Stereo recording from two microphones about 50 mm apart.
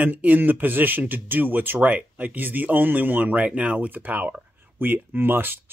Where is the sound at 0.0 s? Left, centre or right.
Right.